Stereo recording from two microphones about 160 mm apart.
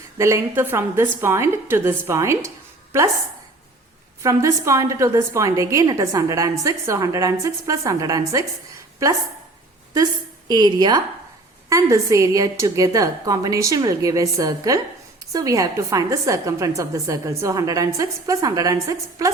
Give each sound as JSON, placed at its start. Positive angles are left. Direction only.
{"t": 0.2, "sound": "a woman's voice", "side_deg": -15}
{"t": 4.2, "sound": "a woman's voice", "side_deg": -20}
{"t": 10.5, "sound": "a woman's voice", "side_deg": -25}